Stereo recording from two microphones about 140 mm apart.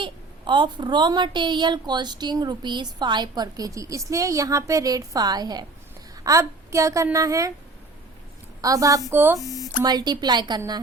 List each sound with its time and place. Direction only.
0.0 s a woman's voice: 35° right (ahead or behind)
8.6 s a woman's voice: 25° right (ahead or behind)
9.4 s speech: 25° left (ahead or behind)
9.8 s a woman's voice: 30° right (ahead or behind)